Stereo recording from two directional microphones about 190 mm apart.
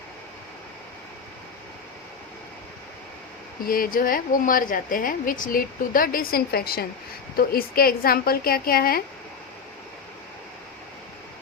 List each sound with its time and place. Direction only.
3.7 s a woman's voice: 50° left (ahead or behind)